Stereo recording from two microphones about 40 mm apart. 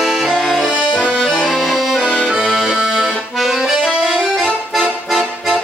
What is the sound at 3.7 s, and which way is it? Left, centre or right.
Accordion, centre.